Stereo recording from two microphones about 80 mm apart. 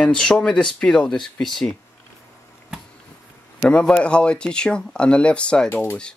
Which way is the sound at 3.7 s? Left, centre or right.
Centre.